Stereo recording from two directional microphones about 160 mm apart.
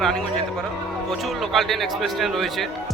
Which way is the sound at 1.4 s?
Centre (ahead or behind).